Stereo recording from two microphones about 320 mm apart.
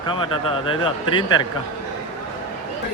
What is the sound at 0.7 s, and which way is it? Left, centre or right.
Speech, centre.